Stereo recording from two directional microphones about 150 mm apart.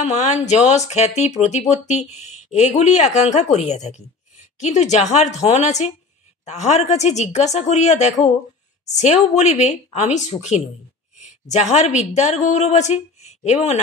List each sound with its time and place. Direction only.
0.0 s a woman's voice: 50° left (ahead or behind)